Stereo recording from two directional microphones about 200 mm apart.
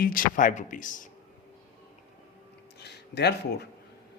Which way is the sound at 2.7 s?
55° left (ahead or behind).